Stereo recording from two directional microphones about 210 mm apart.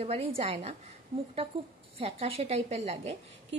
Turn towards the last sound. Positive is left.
turn(degrees=-30)  # may be behind; listen again after turning